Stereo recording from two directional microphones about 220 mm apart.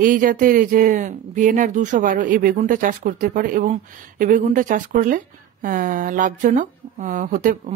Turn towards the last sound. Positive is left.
turn(degrees=-35)  # may be behind; listen again after turning